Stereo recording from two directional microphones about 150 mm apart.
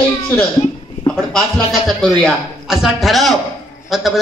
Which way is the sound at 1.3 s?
Centre (ahead or behind).